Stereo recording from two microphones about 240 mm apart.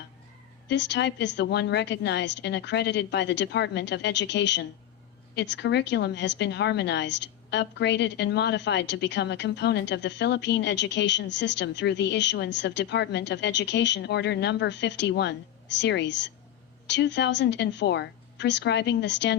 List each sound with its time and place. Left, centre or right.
0.7 s a woman's voice: left